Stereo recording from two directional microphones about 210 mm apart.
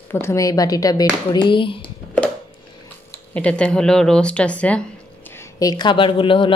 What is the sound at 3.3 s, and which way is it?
Speech, 5° left (ahead or behind).